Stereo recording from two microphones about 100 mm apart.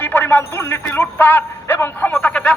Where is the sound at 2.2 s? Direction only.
10° left (ahead or behind).